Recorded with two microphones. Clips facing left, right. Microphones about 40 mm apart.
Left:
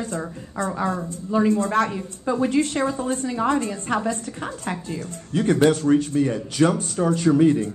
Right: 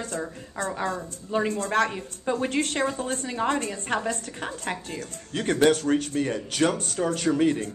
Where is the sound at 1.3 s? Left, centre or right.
Right.